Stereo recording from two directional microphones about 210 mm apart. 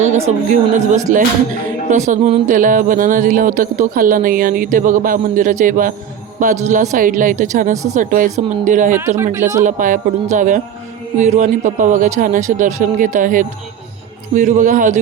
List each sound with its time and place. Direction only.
0.3 s speech: 35° right (ahead or behind)
9.0 s speech: 10° right (ahead or behind)
9.6 s speech: 40° right (ahead or behind)